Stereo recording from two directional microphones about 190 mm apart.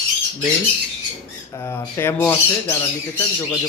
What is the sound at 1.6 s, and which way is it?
Speech, 10° left (ahead or behind).